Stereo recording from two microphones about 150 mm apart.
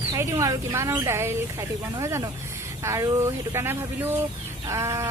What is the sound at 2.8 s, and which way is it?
Speech, 20° right (ahead or behind).